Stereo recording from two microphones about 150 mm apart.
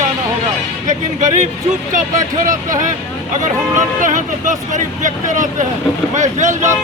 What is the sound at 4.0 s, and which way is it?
Speech, 60° right (ahead or behind).